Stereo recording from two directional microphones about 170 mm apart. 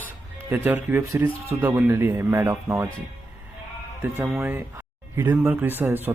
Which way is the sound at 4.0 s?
10° right (ahead or behind).